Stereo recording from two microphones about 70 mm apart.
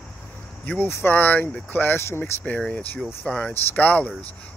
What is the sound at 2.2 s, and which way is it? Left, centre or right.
Speech, left.